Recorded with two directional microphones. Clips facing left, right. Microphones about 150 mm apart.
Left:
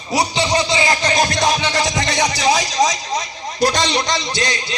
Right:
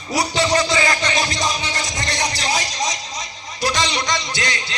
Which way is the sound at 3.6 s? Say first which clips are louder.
Left 4 dB; 35° left (ahead or behind).